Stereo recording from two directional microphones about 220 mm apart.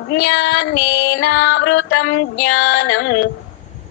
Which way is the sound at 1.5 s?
55° left (ahead or behind).